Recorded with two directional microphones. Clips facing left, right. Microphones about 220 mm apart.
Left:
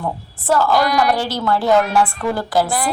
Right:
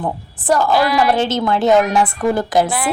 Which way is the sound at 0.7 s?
5° right (ahead or behind).